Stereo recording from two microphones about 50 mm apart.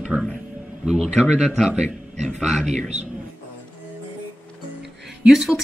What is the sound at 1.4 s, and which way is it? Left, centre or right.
A man's voice, centre.